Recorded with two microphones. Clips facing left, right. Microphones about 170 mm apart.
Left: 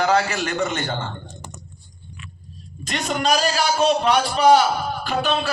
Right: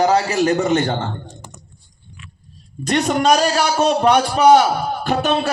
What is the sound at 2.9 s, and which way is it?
A man's voice, 50° right (ahead or behind).